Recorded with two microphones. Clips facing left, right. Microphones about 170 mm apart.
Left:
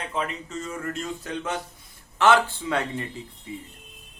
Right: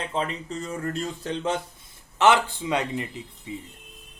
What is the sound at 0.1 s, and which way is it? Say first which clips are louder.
Speech: right 1 dB; 30° right (ahead or behind).